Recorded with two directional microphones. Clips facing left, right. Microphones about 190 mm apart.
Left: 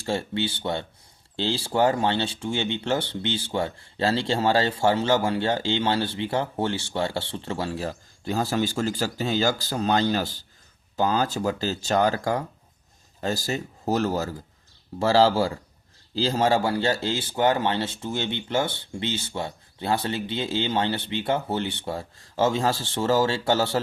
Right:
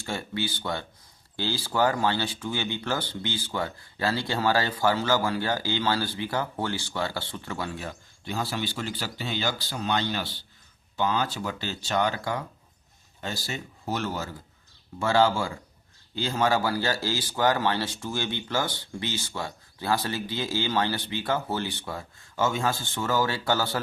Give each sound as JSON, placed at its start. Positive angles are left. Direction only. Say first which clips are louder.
{"t": 0.0, "sound": "speech", "louder": "left 5 dB", "side_deg": 30}